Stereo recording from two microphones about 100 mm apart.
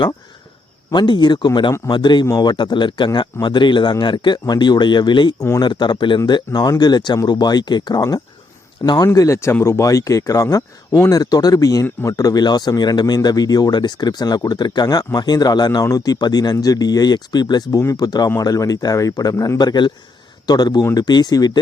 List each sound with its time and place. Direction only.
0.9 s speech: 50° left (ahead or behind)
5.4 s speech: 40° left (ahead or behind)